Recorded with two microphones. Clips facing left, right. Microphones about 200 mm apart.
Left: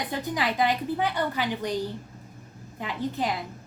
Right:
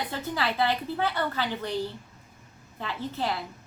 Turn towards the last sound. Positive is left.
turn(degrees=15)  # may be behind; listen again after turning